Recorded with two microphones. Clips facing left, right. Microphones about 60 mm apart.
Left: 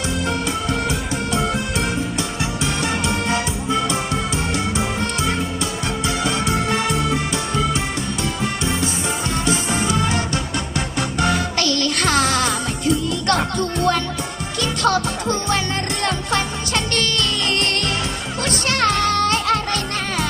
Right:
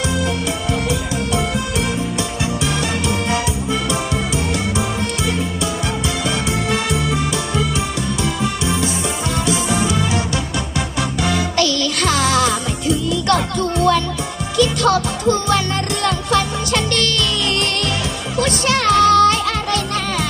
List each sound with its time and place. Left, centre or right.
0.9 s music: left
6.2 s music: left
9.5 s music: left